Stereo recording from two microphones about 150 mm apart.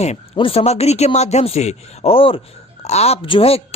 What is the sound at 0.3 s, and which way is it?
A man's voice, 40° left (ahead or behind).